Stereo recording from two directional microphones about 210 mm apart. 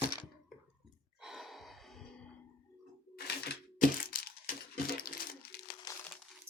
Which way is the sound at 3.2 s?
45° left (ahead or behind).